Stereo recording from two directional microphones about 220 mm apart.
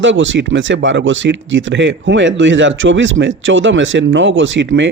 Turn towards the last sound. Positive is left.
turn(degrees=-55)  # may be behind; listen again after turning